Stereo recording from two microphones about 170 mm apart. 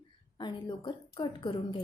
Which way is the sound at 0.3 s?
25° left (ahead or behind).